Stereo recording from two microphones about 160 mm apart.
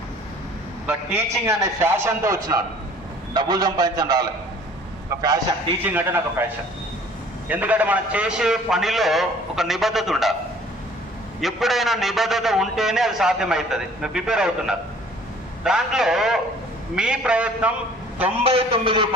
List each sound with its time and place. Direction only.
0.9 s a man's voice: 15° right (ahead or behind)
5.8 s a man's voice: 10° right (ahead or behind)
7.4 s a man's voice: 10° right (ahead or behind)
11.3 s a man's voice: centre (ahead or behind)
18.4 s a man's voice: 35° right (ahead or behind)